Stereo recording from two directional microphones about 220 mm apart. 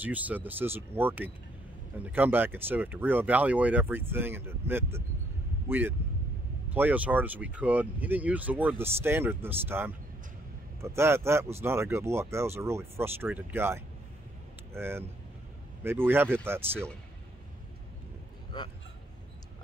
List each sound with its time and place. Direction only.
0.0 s speech: 5° right (ahead or behind)
18.5 s speech: 20° left (ahead or behind)